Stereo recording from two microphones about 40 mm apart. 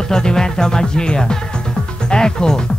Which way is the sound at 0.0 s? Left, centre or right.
Centre.